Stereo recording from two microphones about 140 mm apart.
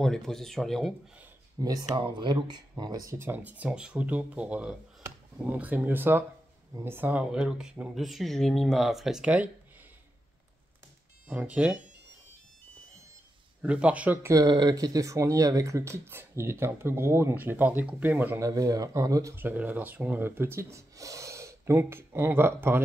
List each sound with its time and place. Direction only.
0.0 s speech: 5° left (ahead or behind)
1.6 s speech: 25° right (ahead or behind); by 9.5 s 10° right (ahead or behind)
11.2 s speech: 10° right (ahead or behind)
13.6 s speech: 10° right (ahead or behind)
14.4 s speech: 30° right (ahead or behind); by 18.4 s 10° right (ahead or behind)
18.4 s speech: 25° right (ahead or behind)